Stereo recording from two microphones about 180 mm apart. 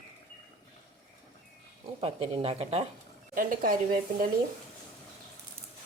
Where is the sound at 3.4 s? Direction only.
50° right (ahead or behind).